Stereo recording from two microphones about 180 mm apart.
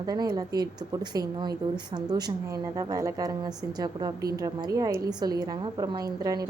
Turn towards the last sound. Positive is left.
turn(degrees=-20)  # may be behind; listen again after turning